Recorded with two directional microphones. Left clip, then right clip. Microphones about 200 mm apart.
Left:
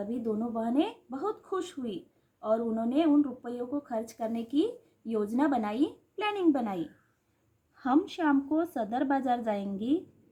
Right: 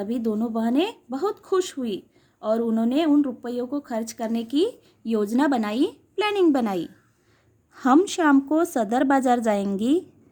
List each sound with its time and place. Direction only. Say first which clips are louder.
0.0 s a woman's voice: right 6 dB; 45° right (ahead or behind)